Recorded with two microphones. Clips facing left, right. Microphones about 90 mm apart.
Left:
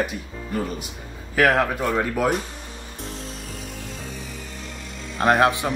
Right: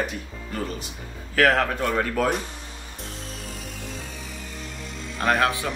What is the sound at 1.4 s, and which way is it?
Speech, 10° left (ahead or behind).